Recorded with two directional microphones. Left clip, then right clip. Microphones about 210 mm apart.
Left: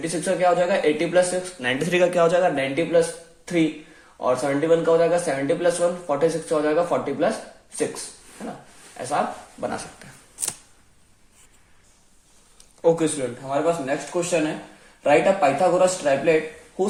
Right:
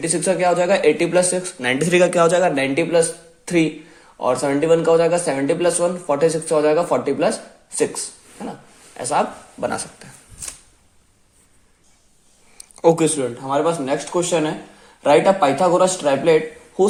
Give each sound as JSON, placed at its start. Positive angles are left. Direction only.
{"t": 0.0, "sound": "speech", "side_deg": -30}
{"t": 9.0, "sound": "speech", "side_deg": -35}
{"t": 12.8, "sound": "speech", "side_deg": -30}